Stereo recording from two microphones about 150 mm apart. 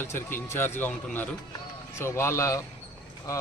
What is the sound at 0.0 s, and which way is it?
Speech, 15° left (ahead or behind).